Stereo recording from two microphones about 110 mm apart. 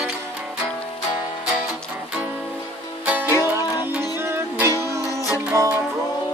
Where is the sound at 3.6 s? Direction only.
35° left (ahead or behind).